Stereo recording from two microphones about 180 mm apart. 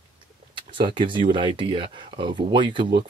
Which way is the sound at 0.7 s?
25° right (ahead or behind).